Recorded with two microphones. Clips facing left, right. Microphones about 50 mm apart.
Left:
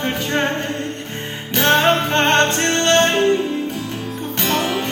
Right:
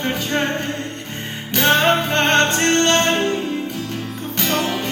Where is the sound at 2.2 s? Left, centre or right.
Centre.